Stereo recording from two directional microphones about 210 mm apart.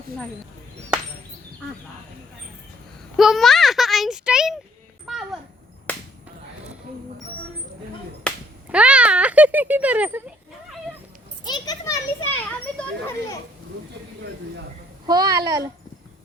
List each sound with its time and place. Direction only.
3.2 s a child's voice: centre (ahead or behind)
5.1 s a sound: centre (ahead or behind)
5.9 s finger snapping: 5° left (ahead or behind)
8.3 s a sound: 5° left (ahead or behind)
8.7 s speech: 5° right (ahead or behind)
11.4 s a child's voice: 20° left (ahead or behind)
15.0 s a woman's voice: 20° right (ahead or behind)